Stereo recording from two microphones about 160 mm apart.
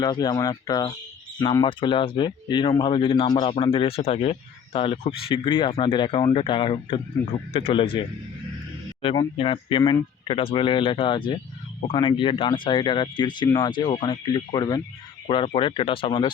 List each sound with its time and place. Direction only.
0.0 s speech: 25° left (ahead or behind)